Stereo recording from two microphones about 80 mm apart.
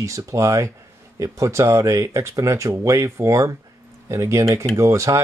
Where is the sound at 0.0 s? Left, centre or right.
Right.